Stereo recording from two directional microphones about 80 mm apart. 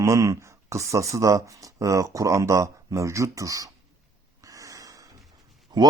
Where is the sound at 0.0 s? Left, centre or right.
Right.